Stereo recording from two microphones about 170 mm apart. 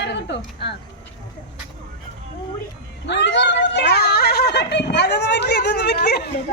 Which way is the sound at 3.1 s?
90° left.